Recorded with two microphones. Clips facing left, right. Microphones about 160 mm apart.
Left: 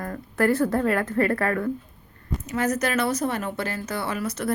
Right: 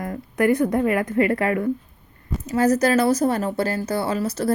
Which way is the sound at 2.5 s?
35° right (ahead or behind).